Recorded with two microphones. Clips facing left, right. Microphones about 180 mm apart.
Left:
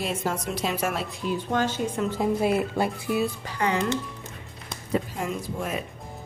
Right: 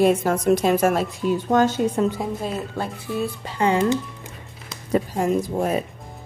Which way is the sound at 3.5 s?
25° right (ahead or behind).